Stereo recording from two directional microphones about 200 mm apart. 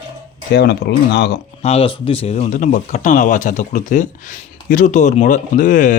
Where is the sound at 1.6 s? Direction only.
30° left (ahead or behind).